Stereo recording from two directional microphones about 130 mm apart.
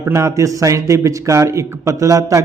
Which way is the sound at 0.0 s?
20° right (ahead or behind).